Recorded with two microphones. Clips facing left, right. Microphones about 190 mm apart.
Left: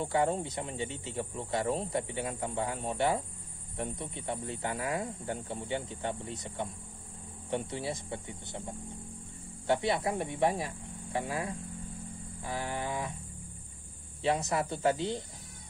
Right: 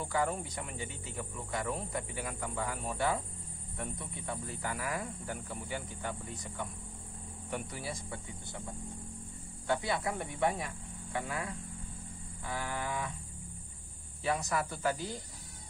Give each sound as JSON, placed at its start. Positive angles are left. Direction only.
{"t": 0.0, "sound": "speech", "side_deg": 25}
{"t": 14.2, "sound": "speech", "side_deg": 25}